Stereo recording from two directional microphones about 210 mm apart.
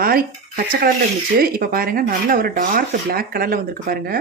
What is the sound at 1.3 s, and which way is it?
Speech, 45° right (ahead or behind).